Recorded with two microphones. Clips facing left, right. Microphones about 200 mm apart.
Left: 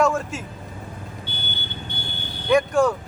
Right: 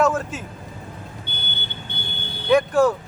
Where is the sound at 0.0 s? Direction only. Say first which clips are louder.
Right 1 dB; centre (ahead or behind).